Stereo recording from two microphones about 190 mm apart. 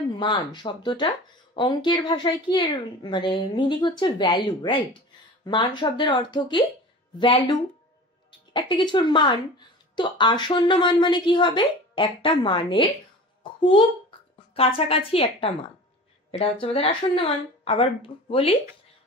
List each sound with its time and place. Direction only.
0.6 s a woman's voice: 25° left (ahead or behind)
13.4 s a sound: 25° left (ahead or behind)
14.5 s a woman's voice: 30° left (ahead or behind)